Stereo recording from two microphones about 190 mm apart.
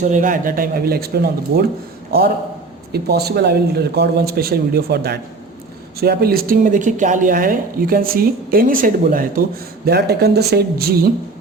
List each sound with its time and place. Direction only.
0.0 s a woman's voice: 40° right (ahead or behind)
2.9 s a woman's voice: 55° right (ahead or behind)
9.8 s speech: 60° right (ahead or behind)